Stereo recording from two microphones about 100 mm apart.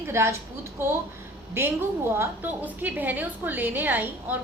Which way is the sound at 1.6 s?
25° right (ahead or behind).